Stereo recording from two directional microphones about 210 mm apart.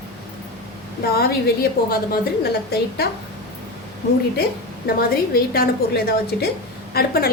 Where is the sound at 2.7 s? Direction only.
50° left (ahead or behind).